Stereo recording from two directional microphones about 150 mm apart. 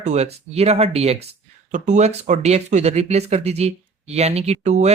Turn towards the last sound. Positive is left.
turn(degrees=-50)  # may be behind; listen again after turning